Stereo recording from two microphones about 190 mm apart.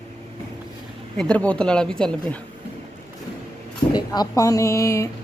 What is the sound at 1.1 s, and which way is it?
Speech, 5° left (ahead or behind).